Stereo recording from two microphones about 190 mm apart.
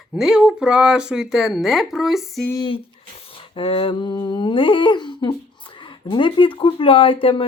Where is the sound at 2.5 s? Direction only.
25° left (ahead or behind).